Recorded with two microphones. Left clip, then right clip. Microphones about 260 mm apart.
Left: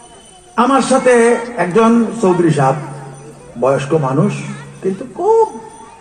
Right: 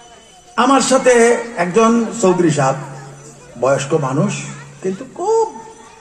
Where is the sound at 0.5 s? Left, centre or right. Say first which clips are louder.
Left 1 dB; right.